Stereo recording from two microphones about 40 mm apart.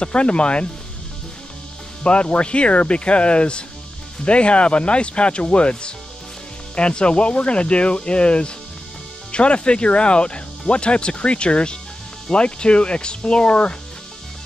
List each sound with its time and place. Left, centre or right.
0.0 s speech: left
2.0 s speech: left